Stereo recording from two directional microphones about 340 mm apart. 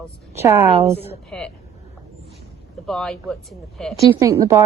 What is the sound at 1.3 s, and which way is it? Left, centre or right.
Speech, centre.